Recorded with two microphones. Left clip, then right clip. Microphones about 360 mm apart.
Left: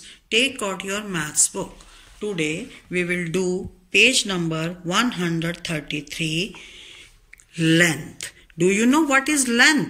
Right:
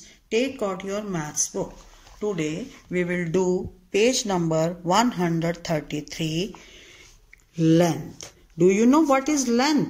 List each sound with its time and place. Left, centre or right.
0.3 s a man's voice: centre